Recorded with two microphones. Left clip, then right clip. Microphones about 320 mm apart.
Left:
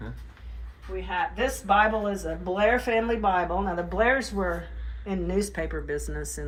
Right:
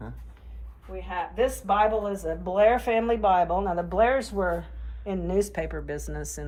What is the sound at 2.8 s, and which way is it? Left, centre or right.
Speech, right.